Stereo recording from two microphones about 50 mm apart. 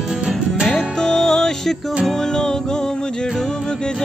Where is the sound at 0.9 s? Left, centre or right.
Centre.